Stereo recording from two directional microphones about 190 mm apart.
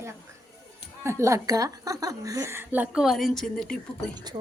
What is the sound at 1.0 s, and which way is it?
Speech, 15° right (ahead or behind).